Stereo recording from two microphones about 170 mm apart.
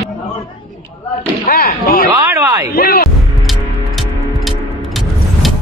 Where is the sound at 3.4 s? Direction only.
Centre (ahead or behind).